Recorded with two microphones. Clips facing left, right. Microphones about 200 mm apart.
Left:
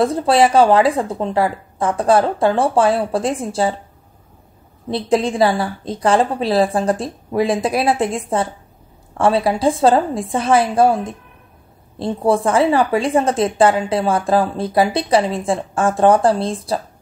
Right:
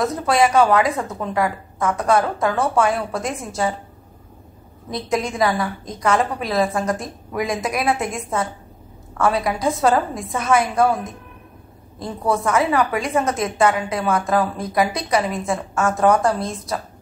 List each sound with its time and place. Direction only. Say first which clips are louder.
0.0 s a woman's voice: left 4 dB; 30° left (ahead or behind)
4.8 s a woman's voice: left 6 dB; 30° left (ahead or behind)